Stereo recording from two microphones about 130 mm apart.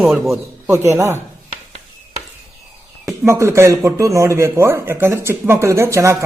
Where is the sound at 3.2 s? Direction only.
20° right (ahead or behind).